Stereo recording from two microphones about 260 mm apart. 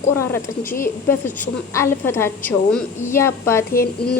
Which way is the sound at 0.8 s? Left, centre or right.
Centre.